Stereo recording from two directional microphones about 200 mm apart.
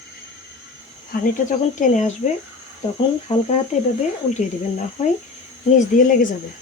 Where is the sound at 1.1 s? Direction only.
40° left (ahead or behind).